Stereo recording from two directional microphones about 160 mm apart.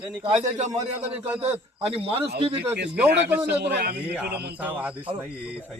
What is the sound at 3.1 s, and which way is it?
Speech, 90° right.